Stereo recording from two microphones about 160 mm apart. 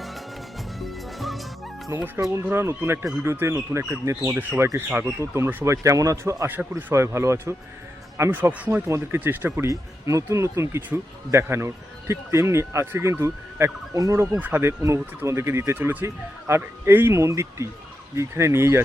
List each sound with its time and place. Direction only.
0.8 s music: centre (ahead or behind)
1.9 s speech: 20° right (ahead or behind)